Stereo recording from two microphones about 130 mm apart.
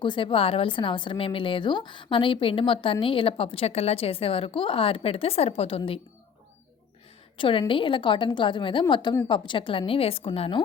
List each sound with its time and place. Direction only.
0.0 s speech: 40° left (ahead or behind)
7.3 s a woman's voice: 40° left (ahead or behind)